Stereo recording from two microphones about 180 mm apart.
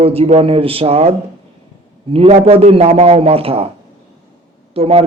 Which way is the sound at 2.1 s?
35° right (ahead or behind).